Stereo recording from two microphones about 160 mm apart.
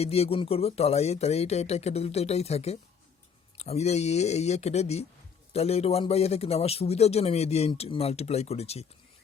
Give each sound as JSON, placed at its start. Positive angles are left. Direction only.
{"t": 0.0, "sound": "a man's voice", "side_deg": 40}